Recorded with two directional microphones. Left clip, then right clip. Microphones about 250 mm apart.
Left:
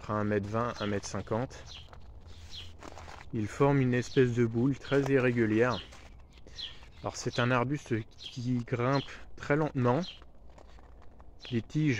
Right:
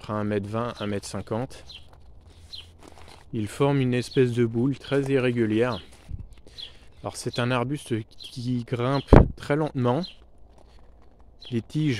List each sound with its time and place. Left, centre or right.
0.0 s speech: right
3.3 s speech: right
7.0 s speech: right
11.5 s speech: right